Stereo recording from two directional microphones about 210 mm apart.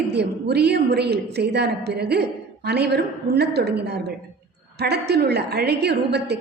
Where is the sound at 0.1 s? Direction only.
50° right (ahead or behind).